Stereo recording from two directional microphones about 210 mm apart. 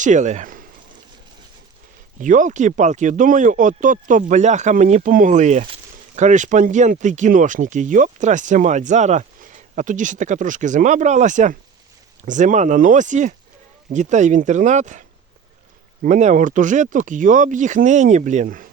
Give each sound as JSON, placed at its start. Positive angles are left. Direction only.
{"t": 0.0, "sound": "speech", "side_deg": -35}
{"t": 2.1, "sound": "speech", "side_deg": -35}
{"t": 16.0, "sound": "speech", "side_deg": -35}